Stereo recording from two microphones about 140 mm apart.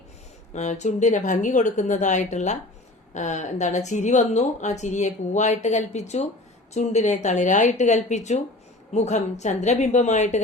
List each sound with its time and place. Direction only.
0.5 s speech: 55° left (ahead or behind)